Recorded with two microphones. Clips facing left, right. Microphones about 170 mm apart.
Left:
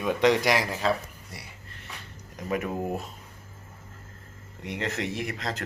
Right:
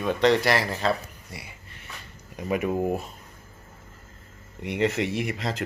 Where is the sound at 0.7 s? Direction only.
5° left (ahead or behind).